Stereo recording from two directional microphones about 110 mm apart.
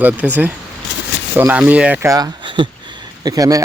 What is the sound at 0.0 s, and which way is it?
Speech, 15° right (ahead or behind).